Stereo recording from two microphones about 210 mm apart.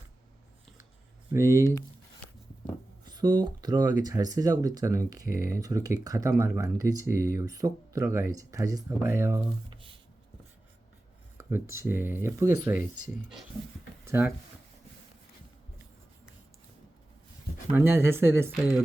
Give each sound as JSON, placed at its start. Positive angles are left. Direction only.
{"t": 1.3, "sound": "speech", "side_deg": -15}
{"t": 3.1, "sound": "speech", "side_deg": -20}
{"t": 11.3, "sound": "a sound", "side_deg": -10}
{"t": 11.8, "sound": "speech", "side_deg": -10}
{"t": 14.0, "sound": "speech", "side_deg": -10}
{"t": 17.7, "sound": "speech", "side_deg": -10}